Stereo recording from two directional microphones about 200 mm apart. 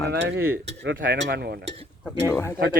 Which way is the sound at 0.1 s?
60° right (ahead or behind).